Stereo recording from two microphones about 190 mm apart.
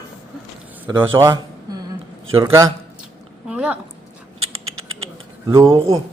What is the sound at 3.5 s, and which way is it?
Speech, 5° right (ahead or behind).